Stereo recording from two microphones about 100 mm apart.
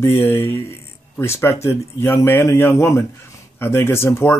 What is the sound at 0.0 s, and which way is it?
Speech, 25° left (ahead or behind).